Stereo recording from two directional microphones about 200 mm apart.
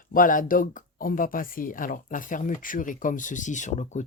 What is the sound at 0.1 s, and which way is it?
Speech, 45° left (ahead or behind).